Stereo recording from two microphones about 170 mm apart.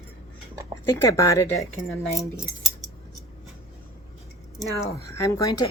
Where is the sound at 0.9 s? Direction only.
20° left (ahead or behind).